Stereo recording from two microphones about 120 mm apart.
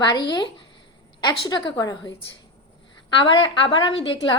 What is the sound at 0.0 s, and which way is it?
A woman's voice, 35° left (ahead or behind).